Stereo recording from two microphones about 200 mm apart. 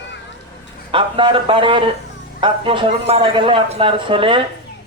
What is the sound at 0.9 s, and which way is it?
A man's voice, 25° right (ahead or behind).